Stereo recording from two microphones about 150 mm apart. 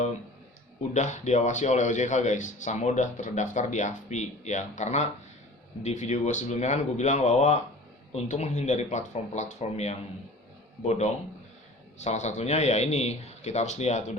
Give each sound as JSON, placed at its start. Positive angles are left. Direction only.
{"t": 0.8, "sound": "a man's voice", "side_deg": 55}